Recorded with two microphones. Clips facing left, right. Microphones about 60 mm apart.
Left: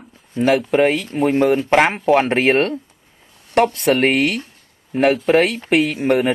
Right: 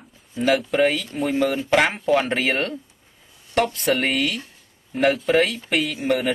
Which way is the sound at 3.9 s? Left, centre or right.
Left.